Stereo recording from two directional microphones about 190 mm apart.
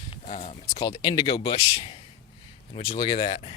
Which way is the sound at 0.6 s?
20° left (ahead or behind).